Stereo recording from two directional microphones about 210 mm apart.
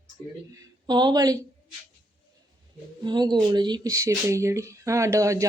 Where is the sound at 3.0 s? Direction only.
20° right (ahead or behind).